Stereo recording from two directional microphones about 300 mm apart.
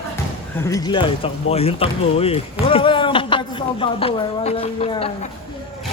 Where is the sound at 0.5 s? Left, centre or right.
Centre.